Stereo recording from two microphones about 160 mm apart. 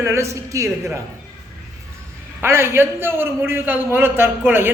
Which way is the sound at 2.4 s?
15° right (ahead or behind).